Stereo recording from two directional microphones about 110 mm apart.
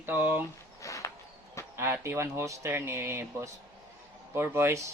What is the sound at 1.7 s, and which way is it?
Speech, 25° right (ahead or behind).